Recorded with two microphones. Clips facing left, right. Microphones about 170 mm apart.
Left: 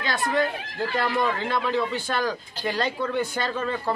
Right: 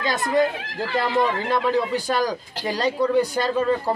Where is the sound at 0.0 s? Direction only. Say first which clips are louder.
Right 3 dB; 40° right (ahead or behind).